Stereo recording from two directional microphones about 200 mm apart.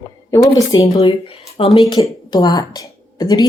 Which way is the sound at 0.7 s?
20° left (ahead or behind).